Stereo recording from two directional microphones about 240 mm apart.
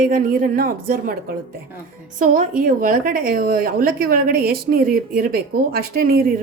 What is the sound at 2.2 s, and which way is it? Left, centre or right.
A woman's voice, right.